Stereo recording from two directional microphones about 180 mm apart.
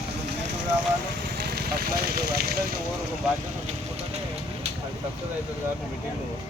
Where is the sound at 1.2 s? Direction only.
60° right (ahead or behind).